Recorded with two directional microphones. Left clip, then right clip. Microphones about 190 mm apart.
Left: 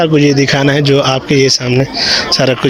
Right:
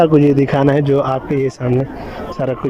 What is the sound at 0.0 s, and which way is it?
A man's voice, 5° right (ahead or behind).